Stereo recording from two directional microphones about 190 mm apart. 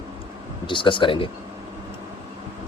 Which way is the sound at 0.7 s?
25° left (ahead or behind).